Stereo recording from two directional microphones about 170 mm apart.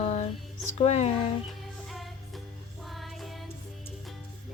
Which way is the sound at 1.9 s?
Centre (ahead or behind).